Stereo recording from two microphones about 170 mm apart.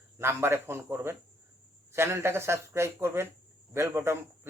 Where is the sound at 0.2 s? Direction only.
15° right (ahead or behind).